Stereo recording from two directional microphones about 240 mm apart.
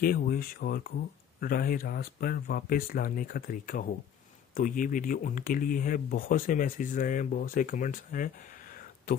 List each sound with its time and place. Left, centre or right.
0.0 s speech: left